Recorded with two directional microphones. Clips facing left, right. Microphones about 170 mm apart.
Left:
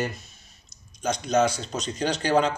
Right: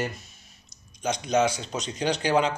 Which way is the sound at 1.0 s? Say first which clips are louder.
Left 1 dB; 15° right (ahead or behind).